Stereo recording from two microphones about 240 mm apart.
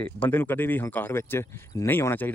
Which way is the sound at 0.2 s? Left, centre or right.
Centre.